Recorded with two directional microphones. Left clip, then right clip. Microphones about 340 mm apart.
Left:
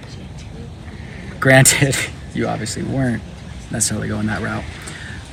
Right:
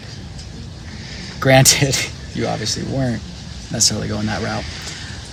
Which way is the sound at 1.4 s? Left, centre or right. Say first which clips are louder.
Even; centre.